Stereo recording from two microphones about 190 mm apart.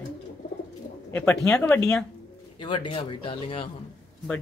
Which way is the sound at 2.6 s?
25° left (ahead or behind).